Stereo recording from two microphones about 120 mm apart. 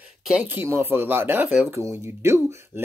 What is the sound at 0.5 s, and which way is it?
Speech, 20° right (ahead or behind).